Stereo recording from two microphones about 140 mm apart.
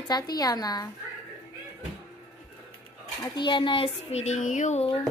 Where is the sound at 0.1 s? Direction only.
25° left (ahead or behind).